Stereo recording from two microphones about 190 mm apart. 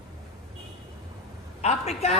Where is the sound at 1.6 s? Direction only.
35° left (ahead or behind).